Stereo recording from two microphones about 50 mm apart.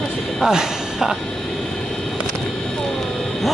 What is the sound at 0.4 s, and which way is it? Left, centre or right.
Speech, centre.